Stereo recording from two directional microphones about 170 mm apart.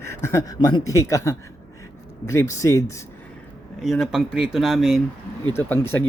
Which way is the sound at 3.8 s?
Centre (ahead or behind).